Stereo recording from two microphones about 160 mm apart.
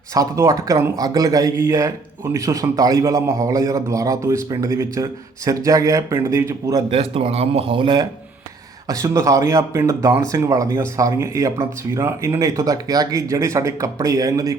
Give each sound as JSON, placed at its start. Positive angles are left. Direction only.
{"t": 0.1, "sound": "a man's voice", "side_deg": -20}
{"t": 6.9, "sound": "speech", "side_deg": -35}
{"t": 8.9, "sound": "a man's voice", "side_deg": -20}